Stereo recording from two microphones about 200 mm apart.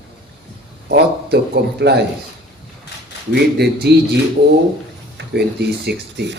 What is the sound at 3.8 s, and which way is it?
Speech, 55° right (ahead or behind).